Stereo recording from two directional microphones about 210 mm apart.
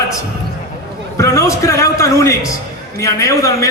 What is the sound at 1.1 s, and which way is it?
A man's voice, 15° left (ahead or behind).